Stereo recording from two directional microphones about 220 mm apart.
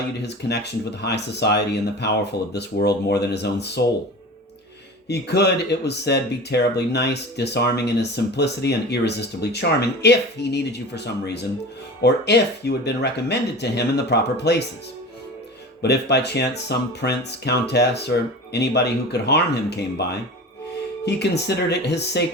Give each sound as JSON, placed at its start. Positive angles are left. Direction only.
{"t": 0.2, "sound": "speech", "side_deg": 50}
{"t": 5.0, "sound": "speech", "side_deg": 50}
{"t": 15.8, "sound": "speech", "side_deg": 50}